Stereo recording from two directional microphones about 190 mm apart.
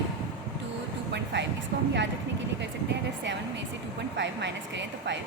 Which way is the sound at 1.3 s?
70° right (ahead or behind).